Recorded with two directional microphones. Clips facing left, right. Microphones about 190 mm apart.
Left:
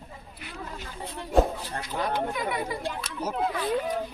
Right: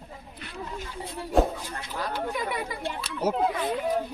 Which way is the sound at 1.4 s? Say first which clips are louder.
Left 1 dB; centre (ahead or behind).